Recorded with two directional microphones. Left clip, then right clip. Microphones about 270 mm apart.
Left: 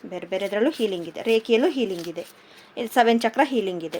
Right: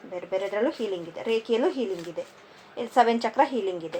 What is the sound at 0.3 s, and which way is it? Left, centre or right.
A woman's voice, left.